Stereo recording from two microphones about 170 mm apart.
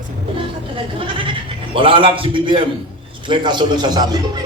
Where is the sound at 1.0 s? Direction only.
30° right (ahead or behind).